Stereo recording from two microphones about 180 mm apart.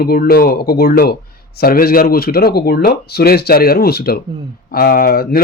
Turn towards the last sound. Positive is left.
turn(degrees=60)  # may be behind; listen again after turning